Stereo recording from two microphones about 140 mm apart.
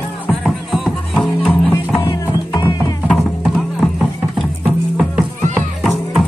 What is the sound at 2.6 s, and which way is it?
Music, 25° left (ahead or behind).